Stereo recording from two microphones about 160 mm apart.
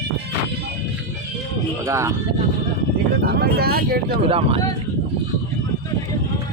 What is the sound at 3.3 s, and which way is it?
Speech, 75° right (ahead or behind).